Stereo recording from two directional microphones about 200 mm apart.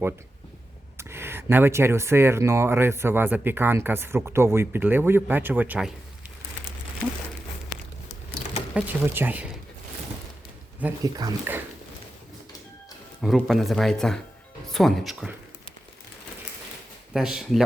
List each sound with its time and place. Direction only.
0.9 s speech: 10° right (ahead or behind)
8.7 s speech: 10° right (ahead or behind)
10.8 s speech: 15° right (ahead or behind)
13.2 s speech: centre (ahead or behind)
17.2 s speech: centre (ahead or behind)